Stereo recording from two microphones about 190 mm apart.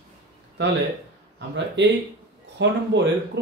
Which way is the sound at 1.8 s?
70° right (ahead or behind).